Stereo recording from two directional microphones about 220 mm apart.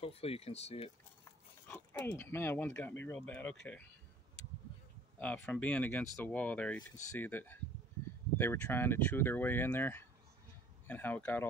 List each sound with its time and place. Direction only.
0.0 s speech: 25° left (ahead or behind)
1.7 s speech: 10° left (ahead or behind)
5.2 s speech: 10° left (ahead or behind)